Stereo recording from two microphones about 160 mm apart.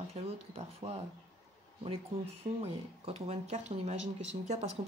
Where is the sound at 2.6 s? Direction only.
40° right (ahead or behind).